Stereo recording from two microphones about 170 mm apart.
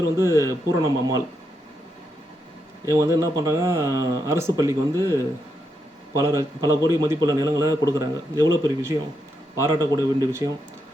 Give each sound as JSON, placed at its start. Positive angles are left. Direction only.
{"t": 0.2, "sound": "a man's voice", "side_deg": -15}
{"t": 2.8, "sound": "a man's voice", "side_deg": -20}